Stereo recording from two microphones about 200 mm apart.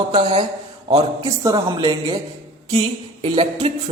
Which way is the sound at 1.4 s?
20° right (ahead or behind).